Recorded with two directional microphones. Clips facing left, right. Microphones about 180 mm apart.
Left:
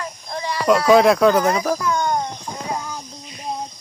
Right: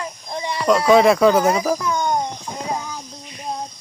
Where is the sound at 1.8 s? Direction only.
15° right (ahead or behind).